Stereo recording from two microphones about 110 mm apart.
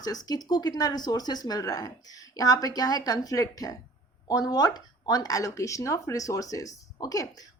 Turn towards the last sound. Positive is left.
turn(degrees=35)  # may be behind; listen again after turning